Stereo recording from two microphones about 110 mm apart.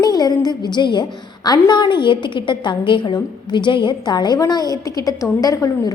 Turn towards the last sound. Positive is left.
turn(degrees=30)  # may be behind; listen again after turning